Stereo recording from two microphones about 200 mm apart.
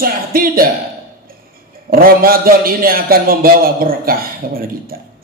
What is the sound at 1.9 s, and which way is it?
A man's voice, 45° right (ahead or behind).